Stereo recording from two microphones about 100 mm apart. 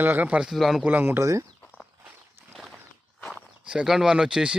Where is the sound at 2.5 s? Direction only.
Centre (ahead or behind).